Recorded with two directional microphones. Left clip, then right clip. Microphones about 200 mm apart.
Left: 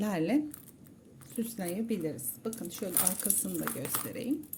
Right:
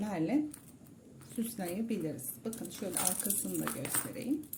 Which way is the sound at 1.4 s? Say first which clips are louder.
Left 2 dB; 15° left (ahead or behind).